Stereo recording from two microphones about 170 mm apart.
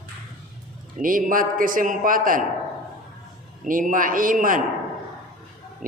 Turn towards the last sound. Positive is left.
turn(degrees=-55)  # may be behind; listen again after turning